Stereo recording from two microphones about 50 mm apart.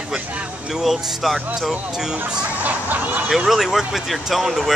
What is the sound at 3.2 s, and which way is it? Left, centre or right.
Speech, centre.